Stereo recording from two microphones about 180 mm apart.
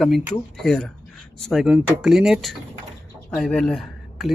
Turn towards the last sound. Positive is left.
turn(degrees=0)  # may be behind; listen again after turning